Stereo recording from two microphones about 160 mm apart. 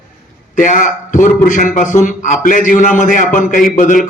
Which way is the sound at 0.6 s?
55° left (ahead or behind).